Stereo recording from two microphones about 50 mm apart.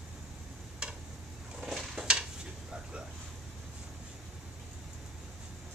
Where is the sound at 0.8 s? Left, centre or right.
Centre.